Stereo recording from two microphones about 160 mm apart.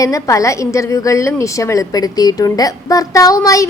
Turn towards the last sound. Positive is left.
turn(degrees=20)  # may be behind; listen again after turning